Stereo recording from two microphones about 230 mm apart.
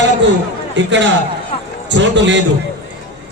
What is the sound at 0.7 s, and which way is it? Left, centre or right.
A man's voice, right.